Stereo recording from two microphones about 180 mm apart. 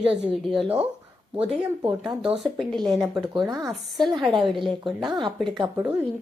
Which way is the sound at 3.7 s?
Centre (ahead or behind).